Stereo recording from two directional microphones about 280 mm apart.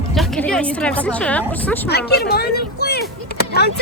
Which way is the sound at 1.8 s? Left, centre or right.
Left.